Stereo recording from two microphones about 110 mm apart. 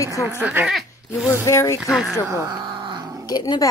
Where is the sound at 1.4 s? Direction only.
25° left (ahead or behind).